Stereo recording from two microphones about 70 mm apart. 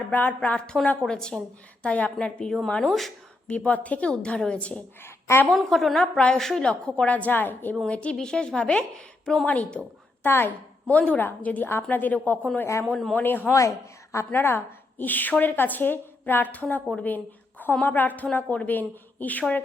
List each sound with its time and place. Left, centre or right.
0.1 s a woman's voice: left; by 3.1 s centre
3.4 s a woman's voice: centre
5.0 s a woman's voice: left
5.5 s a woman's voice: centre; by 7.8 s left
7.9 s a woman's voice: centre
10.2 s a woman's voice: left
10.8 s a woman's voice: centre
12.8 s a man's voice: centre
13.1 s a woman's voice: left
13.5 s a woman's voice: left
14.3 s a woman's voice: left